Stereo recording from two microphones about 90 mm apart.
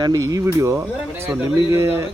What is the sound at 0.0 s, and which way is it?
Speech, 45° right (ahead or behind).